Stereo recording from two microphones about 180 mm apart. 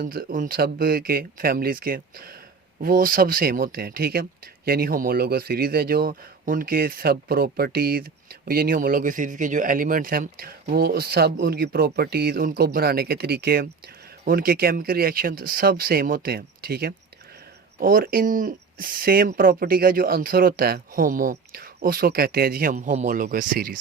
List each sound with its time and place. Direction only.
0.0 s speech: 50° right (ahead or behind)